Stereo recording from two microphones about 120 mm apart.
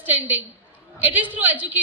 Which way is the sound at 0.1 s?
15° right (ahead or behind).